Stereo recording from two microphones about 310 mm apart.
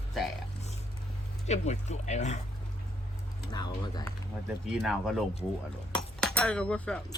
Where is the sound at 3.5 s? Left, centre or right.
Centre.